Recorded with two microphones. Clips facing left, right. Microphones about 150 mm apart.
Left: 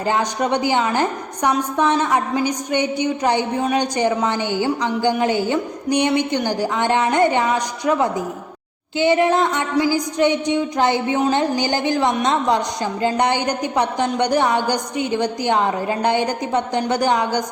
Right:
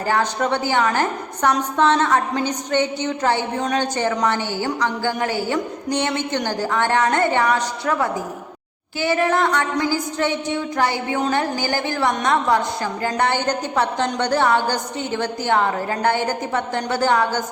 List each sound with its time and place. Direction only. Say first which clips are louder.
0.0 s a woman's voice: left 1 dB; 20° left (ahead or behind)
9.0 s a sound: left 3 dB; 20° left (ahead or behind)
12.2 s a woman's voice: even; 20° left (ahead or behind)